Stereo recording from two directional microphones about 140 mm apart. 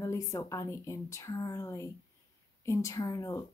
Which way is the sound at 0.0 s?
25° left (ahead or behind).